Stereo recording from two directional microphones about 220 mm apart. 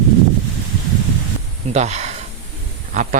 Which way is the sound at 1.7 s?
30° right (ahead or behind).